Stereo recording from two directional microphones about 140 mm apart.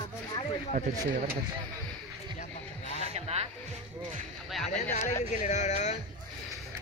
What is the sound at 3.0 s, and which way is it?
Music, 50° right (ahead or behind).